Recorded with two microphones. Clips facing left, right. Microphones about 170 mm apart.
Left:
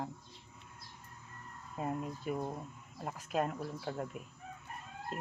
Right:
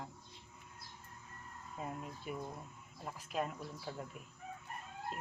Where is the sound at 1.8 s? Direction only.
45° left (ahead or behind).